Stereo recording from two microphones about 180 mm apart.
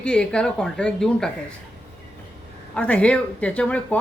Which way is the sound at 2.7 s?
5° left (ahead or behind).